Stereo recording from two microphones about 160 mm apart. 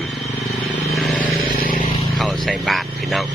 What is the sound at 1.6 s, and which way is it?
Vehicle, 60° left (ahead or behind).